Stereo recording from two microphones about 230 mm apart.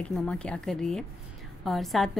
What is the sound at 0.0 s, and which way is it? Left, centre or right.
A woman's voice, centre.